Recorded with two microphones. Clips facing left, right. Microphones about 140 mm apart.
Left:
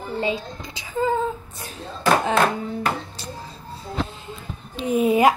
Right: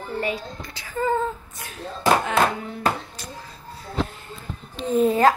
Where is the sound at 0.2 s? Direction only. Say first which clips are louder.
Left 3 dB; 25° left (ahead or behind).